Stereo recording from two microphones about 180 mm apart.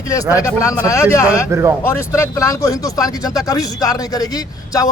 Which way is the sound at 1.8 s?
15° left (ahead or behind).